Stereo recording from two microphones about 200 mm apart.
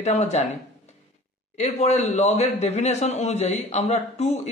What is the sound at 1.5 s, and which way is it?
A man's voice, 35° left (ahead or behind).